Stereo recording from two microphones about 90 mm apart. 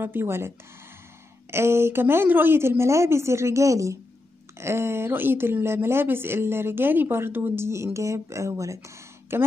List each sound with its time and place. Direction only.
0.0 s speech: 25° right (ahead or behind)
1.5 s speech: 30° right (ahead or behind)